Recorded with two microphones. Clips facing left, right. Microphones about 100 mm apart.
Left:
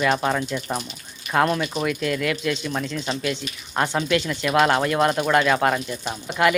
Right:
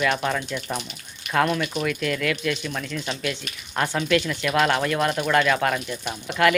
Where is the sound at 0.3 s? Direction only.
10° left (ahead or behind).